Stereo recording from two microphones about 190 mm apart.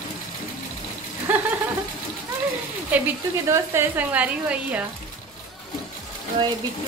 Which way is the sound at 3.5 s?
10° right (ahead or behind).